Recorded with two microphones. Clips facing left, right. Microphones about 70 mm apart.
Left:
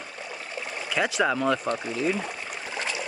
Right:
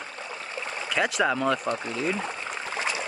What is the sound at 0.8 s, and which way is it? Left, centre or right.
Speech, centre.